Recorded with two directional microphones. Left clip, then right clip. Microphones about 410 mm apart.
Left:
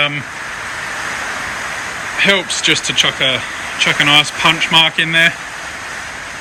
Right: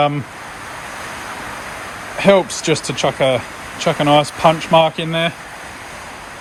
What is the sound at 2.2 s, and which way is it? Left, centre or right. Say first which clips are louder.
Speech: even; centre.